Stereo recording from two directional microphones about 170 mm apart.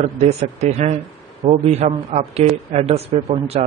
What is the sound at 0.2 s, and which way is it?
A man's voice, 40° right (ahead or behind).